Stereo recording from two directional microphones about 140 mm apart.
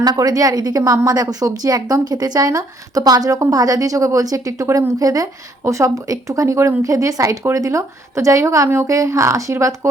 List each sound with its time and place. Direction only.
0.0 s a woman's voice: 30° right (ahead or behind)